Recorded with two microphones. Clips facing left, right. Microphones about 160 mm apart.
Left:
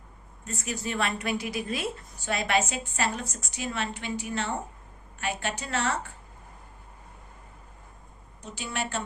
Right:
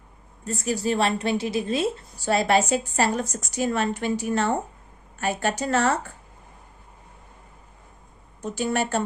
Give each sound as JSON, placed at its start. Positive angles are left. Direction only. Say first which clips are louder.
{"t": 0.4, "sound": "a woman's voice", "louder": "right 9 dB", "side_deg": -35}
{"t": 8.4, "sound": "a woman's voice", "louder": "right 9 dB", "side_deg": -45}